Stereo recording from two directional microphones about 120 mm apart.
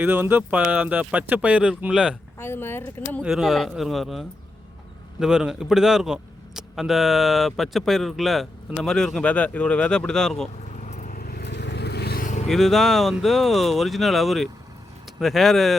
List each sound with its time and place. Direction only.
0.0 s speech: 15° right (ahead or behind)
2.4 s speech: 20° left (ahead or behind)
3.2 s speech: centre (ahead or behind)
10.7 s vehicle: 70° left (ahead or behind)
12.2 s vehicle: 90° left
12.5 s speech: centre (ahead or behind)